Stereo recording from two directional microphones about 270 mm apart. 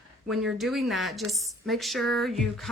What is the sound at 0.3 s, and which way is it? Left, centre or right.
A woman's voice, centre.